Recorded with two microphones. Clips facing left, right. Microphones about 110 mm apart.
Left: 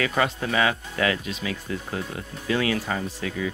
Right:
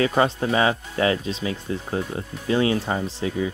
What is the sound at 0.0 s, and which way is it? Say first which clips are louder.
Speech: right 4 dB; 30° right (ahead or behind).